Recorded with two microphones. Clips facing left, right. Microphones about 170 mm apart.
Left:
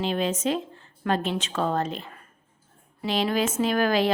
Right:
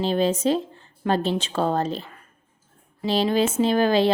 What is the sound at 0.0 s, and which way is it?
A woman's voice, 35° right (ahead or behind).